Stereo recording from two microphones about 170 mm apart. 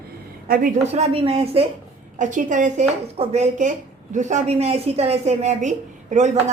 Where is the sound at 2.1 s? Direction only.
50° right (ahead or behind).